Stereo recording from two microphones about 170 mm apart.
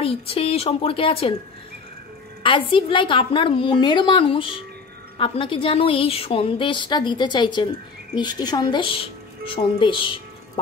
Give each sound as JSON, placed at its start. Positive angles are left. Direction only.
{"t": 0.0, "sound": "a woman's voice", "side_deg": 35}
{"t": 2.4, "sound": "a woman's voice", "side_deg": 30}